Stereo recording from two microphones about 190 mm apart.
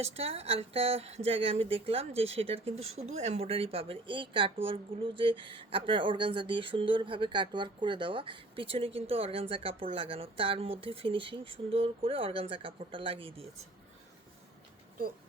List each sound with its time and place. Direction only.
0.0 s speech: 30° right (ahead or behind)